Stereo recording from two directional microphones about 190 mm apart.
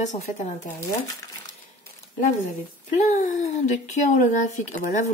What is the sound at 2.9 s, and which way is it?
Speech, 40° left (ahead or behind).